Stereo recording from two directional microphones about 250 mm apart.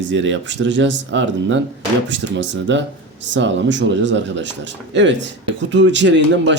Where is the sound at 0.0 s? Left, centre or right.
Right.